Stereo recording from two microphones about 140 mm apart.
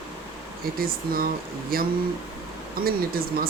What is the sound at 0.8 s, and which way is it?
Speech, 90° right.